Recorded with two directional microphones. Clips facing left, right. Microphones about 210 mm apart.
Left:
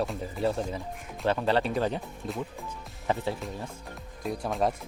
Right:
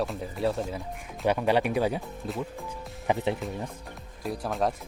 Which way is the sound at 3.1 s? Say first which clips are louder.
Right 3 dB; 15° right (ahead or behind).